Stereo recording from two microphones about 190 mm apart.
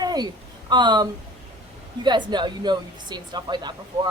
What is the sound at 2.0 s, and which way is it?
A woman's voice, 25° right (ahead or behind).